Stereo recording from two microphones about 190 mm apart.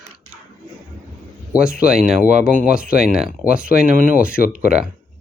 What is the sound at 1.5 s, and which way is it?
Speech, 5° right (ahead or behind).